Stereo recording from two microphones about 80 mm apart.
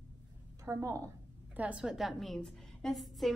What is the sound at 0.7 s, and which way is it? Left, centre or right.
Speech, right.